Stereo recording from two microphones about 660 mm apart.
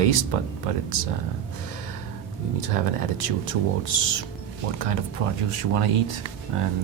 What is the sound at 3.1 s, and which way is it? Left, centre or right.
Speech, right.